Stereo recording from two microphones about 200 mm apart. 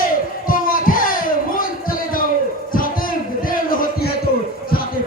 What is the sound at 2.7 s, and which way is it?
Music, 45° left (ahead or behind).